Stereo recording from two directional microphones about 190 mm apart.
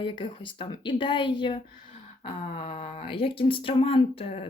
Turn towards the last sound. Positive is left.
turn(degrees=30)  # may be behind; listen again after turning